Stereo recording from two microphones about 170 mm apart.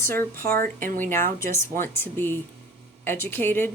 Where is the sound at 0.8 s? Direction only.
50° right (ahead or behind).